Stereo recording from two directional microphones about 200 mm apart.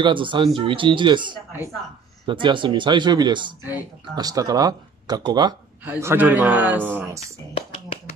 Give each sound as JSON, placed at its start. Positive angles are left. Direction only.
{"t": 0.0, "sound": "speech", "side_deg": -25}